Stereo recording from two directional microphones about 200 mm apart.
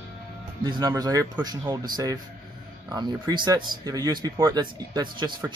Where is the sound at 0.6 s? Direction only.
20° right (ahead or behind).